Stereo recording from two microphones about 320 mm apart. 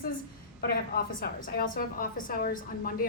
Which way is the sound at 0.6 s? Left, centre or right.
Left.